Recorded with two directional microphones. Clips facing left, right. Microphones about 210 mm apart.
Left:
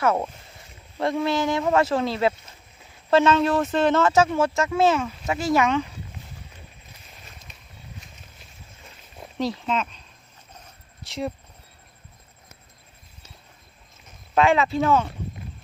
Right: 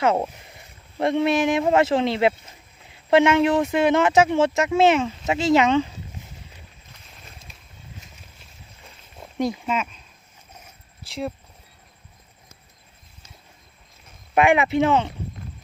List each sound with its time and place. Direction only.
0.0 s speech: 20° right (ahead or behind)
9.4 s speech: 10° right (ahead or behind)
10.5 s a sound: 10° right (ahead or behind)
14.3 s speech: 15° right (ahead or behind)